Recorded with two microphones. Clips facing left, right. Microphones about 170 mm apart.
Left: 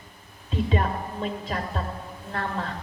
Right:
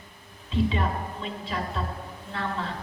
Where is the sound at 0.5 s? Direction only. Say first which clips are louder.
Even; 45° left (ahead or behind).